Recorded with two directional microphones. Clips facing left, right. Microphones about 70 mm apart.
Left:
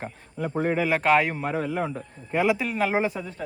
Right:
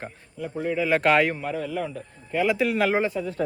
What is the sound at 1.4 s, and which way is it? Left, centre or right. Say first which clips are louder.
Speech: left 2 dB; left.